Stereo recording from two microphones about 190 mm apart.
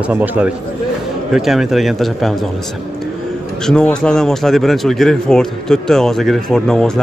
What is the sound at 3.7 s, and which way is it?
Speech, 5° left (ahead or behind).